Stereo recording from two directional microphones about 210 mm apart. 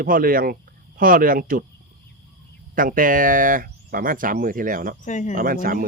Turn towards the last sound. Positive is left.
turn(degrees=-40)  # may be behind; listen again after turning